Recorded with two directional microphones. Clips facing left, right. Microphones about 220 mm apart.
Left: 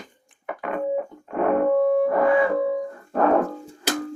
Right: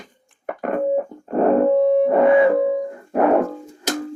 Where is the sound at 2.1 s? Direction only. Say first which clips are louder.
Right 5 dB; 25° right (ahead or behind).